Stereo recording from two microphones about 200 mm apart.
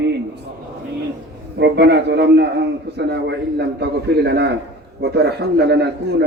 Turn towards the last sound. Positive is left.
turn(degrees=-55)  # may be behind; listen again after turning